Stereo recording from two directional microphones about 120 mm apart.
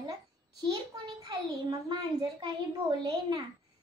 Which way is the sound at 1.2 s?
35° right (ahead or behind).